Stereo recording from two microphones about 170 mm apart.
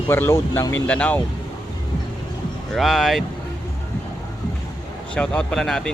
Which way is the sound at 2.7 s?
Centre (ahead or behind).